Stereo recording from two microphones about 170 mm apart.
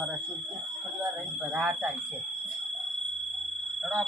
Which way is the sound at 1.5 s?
5° right (ahead or behind).